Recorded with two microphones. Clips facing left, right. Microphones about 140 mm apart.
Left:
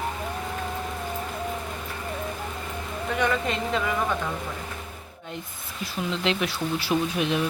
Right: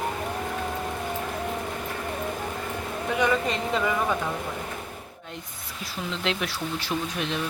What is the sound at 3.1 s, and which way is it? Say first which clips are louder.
Speech: right 1 dB; 5° right (ahead or behind).